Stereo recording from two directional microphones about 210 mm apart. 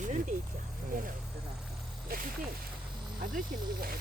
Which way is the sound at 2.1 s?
45° right (ahead or behind).